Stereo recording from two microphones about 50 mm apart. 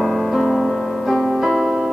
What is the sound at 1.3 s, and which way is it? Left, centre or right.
Piano, centre.